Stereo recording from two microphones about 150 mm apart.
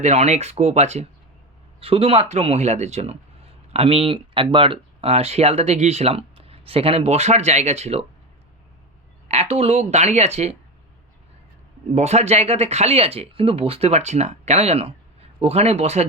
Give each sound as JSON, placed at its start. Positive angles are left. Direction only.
{"t": 0.0, "sound": "speech", "side_deg": -45}
{"t": 9.3, "sound": "speech", "side_deg": -45}
{"t": 11.9, "sound": "speech", "side_deg": -45}